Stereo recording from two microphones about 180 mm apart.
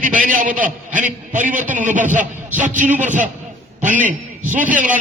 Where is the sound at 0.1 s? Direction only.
45° right (ahead or behind).